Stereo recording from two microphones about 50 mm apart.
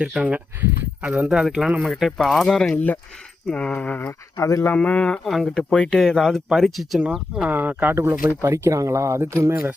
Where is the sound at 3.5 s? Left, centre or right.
Left.